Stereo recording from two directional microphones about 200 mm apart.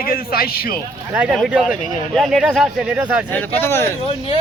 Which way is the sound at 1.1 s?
5° right (ahead or behind).